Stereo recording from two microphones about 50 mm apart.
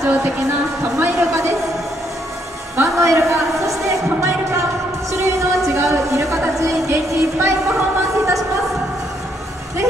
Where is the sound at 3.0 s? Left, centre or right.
Right.